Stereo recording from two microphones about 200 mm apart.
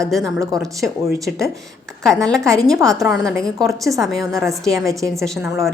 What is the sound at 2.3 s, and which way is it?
A woman's voice, 5° left (ahead or behind).